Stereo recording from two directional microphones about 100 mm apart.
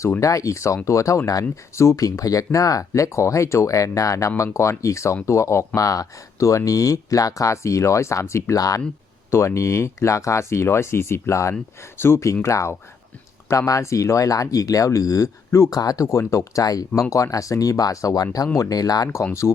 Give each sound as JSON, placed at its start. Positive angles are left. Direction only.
{"t": 0.0, "sound": "speech", "side_deg": 30}
{"t": 19.0, "sound": "speech", "side_deg": 25}